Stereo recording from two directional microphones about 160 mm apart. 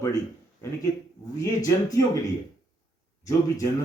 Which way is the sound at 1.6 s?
20° left (ahead or behind).